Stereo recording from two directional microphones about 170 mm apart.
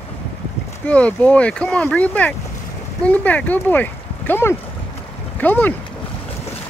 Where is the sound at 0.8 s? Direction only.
10° left (ahead or behind).